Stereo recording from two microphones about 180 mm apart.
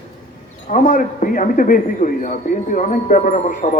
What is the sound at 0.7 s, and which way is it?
A man's voice, 45° left (ahead or behind).